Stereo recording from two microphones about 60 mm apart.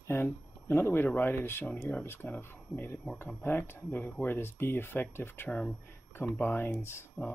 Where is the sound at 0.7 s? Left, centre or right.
Left.